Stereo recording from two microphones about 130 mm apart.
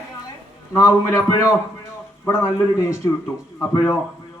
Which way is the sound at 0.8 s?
25° left (ahead or behind).